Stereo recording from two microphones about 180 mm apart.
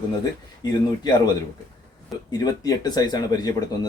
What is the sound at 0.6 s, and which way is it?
Speech, 25° left (ahead or behind).